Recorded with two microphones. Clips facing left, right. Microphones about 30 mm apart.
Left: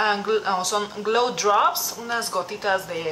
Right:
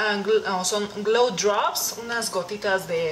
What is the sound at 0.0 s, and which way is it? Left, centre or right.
Speech, centre.